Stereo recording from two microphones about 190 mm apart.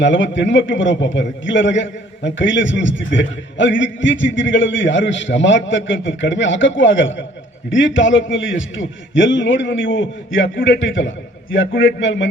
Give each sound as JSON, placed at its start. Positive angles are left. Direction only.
{"t": 0.0, "sound": "a man's voice", "side_deg": 75}